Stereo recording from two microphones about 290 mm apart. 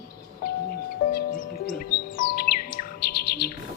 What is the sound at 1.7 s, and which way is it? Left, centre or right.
Music, left.